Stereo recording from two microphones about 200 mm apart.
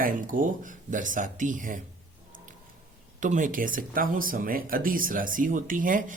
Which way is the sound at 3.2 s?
40° right (ahead or behind).